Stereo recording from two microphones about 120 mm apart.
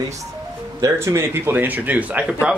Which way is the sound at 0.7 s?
25° right (ahead or behind).